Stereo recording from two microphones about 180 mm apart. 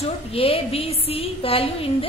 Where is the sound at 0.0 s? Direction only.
30° left (ahead or behind).